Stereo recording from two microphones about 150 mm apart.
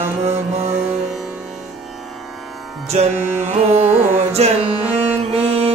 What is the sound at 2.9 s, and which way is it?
Music, 50° right (ahead or behind).